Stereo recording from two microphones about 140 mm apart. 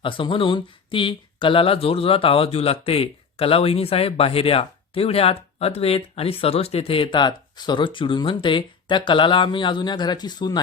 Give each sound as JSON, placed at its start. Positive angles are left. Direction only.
{"t": 0.0, "sound": "speech", "side_deg": 40}